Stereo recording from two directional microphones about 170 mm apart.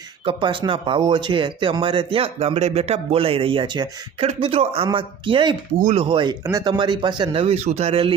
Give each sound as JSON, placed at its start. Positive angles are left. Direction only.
{"t": 0.3, "sound": "speech", "side_deg": -30}